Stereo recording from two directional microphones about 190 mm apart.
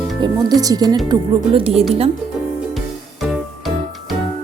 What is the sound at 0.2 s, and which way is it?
Speech, 20° right (ahead or behind).